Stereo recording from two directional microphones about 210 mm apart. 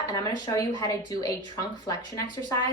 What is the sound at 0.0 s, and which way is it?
A woman's voice, 20° left (ahead or behind).